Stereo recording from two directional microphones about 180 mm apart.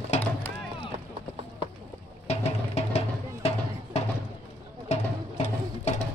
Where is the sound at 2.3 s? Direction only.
35° left (ahead or behind).